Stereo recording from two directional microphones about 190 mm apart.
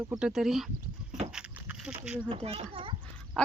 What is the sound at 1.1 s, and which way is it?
Vehicle, 35° right (ahead or behind).